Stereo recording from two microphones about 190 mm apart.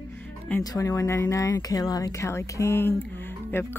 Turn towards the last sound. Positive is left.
turn(degrees=10)  # may be behind; listen again after turning